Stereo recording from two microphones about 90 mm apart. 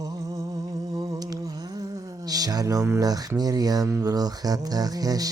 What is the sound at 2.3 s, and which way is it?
Speech, 45° right (ahead or behind).